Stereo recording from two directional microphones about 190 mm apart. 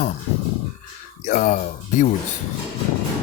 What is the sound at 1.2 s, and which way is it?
Speech, 40° left (ahead or behind).